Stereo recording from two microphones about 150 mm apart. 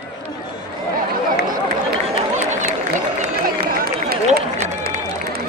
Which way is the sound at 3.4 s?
85° right.